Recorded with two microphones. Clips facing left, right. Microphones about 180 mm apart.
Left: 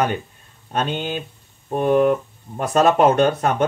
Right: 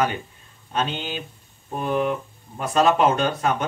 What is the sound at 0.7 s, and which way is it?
Speech, 50° left (ahead or behind).